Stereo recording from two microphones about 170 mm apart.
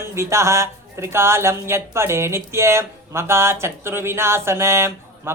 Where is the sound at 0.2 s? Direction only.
15° right (ahead or behind).